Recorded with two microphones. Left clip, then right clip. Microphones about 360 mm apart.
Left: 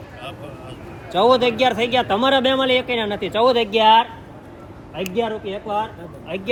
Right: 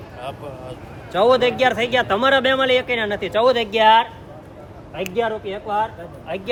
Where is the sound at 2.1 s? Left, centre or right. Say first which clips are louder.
Right 2 dB; centre.